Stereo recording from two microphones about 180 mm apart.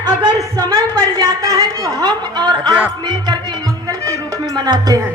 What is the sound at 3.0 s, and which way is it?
Music, 20° right (ahead or behind).